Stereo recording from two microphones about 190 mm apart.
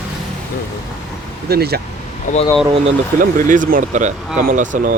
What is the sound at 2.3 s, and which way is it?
Speech, 40° left (ahead or behind).